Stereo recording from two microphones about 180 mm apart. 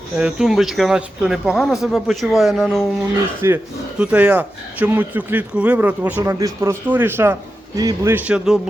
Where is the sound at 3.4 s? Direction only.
15° right (ahead or behind).